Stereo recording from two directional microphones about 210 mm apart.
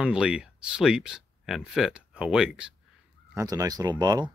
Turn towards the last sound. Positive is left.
turn(degrees=-20)  # may be behind; listen again after turning